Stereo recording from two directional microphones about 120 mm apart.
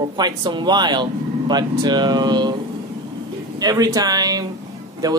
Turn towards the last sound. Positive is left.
turn(degrees=-30)  # may be behind; listen again after turning